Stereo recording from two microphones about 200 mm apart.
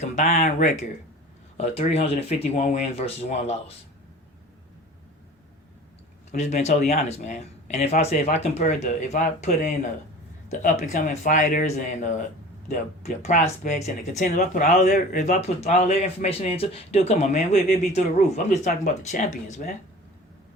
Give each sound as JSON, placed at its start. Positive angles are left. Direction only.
{"t": 0.0, "sound": "speech", "side_deg": 35}
{"t": 6.3, "sound": "speech", "side_deg": 35}